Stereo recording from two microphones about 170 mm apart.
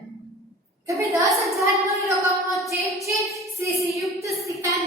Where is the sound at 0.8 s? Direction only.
20° right (ahead or behind).